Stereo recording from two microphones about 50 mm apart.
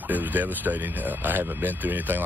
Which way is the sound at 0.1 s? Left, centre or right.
Right.